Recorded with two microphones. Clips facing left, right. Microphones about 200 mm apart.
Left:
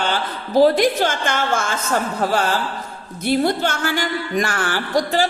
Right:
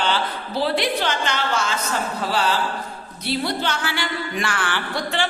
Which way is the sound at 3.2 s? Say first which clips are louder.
Left 6 dB; 50° left (ahead or behind).